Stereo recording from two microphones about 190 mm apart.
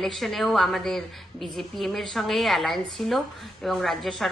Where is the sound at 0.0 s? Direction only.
Centre (ahead or behind).